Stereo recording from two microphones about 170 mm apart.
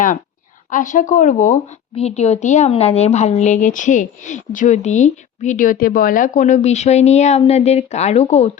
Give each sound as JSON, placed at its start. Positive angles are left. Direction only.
{"t": 0.7, "sound": "a woman's voice", "side_deg": 50}
{"t": 2.0, "sound": "a woman's voice", "side_deg": 40}